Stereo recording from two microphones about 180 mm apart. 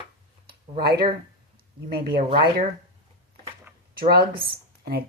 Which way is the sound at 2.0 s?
55° right (ahead or behind).